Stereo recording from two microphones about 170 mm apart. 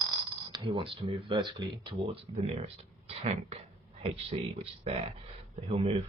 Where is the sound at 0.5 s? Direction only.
30° right (ahead or behind).